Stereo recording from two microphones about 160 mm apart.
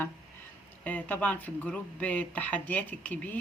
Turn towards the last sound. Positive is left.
turn(degrees=10)  # may be behind; listen again after turning